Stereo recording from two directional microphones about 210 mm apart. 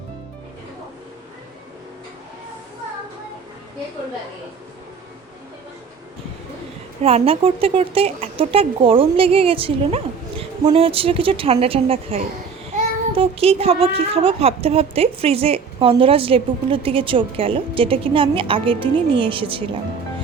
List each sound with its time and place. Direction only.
7.0 s a woman's voice: 30° right (ahead or behind)